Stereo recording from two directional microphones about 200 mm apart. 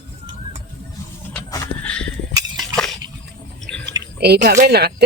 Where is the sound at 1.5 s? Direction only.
15° left (ahead or behind).